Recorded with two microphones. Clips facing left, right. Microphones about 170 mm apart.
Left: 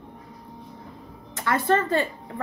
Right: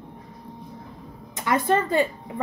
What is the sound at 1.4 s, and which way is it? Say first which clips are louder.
Speech: even; 15° right (ahead or behind).